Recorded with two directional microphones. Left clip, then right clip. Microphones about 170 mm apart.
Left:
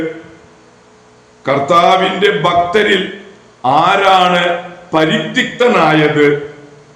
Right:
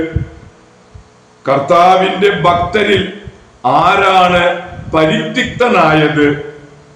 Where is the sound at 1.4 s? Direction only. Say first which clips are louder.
Right 1 dB; 15° left (ahead or behind).